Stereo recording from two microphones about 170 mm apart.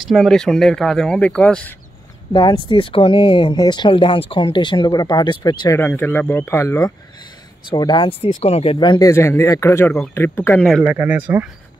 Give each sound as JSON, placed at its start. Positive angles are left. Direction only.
{"t": 0.0, "sound": "speech", "side_deg": 0}
{"t": 2.3, "sound": "speech", "side_deg": 30}
{"t": 5.8, "sound": "speech", "side_deg": 10}
{"t": 7.7, "sound": "speech", "side_deg": 25}
{"t": 9.1, "sound": "speech", "side_deg": 15}
{"t": 10.8, "sound": "speech", "side_deg": -10}